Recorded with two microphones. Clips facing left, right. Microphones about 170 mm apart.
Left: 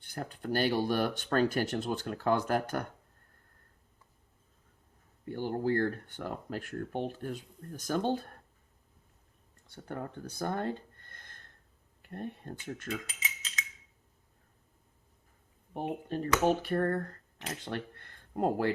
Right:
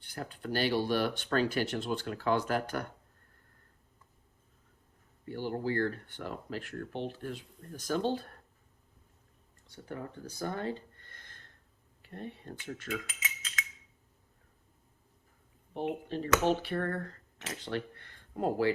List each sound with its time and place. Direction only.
0.1 s speech: 45° left (ahead or behind)
5.3 s speech: 50° left (ahead or behind)
9.6 s speech: 55° left (ahead or behind)
15.7 s speech: 45° left (ahead or behind)